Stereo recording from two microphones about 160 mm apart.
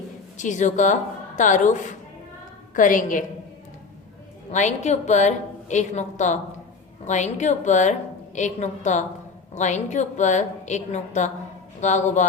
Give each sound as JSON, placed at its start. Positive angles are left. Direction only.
{"t": 0.3, "sound": "a woman's voice", "side_deg": 50}
{"t": 4.5, "sound": "a woman's voice", "side_deg": 45}